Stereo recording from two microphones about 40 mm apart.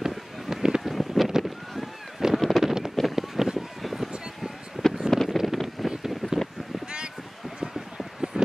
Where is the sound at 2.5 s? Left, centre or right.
Centre.